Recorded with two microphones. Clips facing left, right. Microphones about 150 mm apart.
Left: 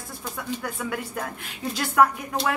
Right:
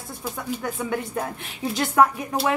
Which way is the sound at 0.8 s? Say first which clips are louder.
Right 4 dB; 30° right (ahead or behind).